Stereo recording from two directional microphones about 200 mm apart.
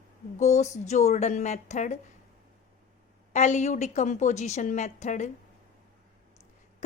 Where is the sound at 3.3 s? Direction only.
35° left (ahead or behind).